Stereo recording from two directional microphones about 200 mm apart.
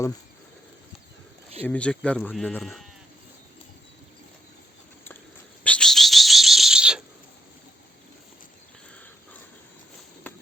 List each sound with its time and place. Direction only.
1.6 s speech: 5° left (ahead or behind)
5.6 s bird: 5° left (ahead or behind)
10.3 s a sound: 10° left (ahead or behind)